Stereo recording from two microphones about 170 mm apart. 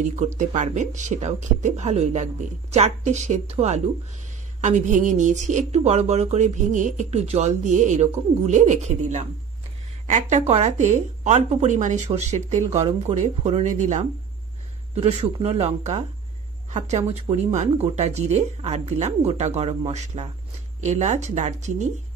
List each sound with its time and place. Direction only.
0.4 s a woman's voice: 45° right (ahead or behind)